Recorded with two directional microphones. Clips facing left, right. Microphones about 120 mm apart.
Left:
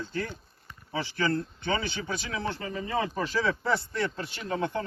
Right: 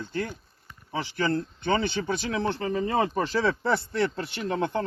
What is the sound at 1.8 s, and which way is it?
Speech, 55° right (ahead or behind).